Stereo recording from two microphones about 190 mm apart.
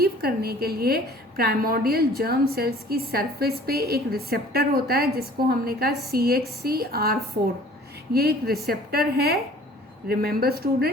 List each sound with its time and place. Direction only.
0.0 s a woman's voice: 55° right (ahead or behind)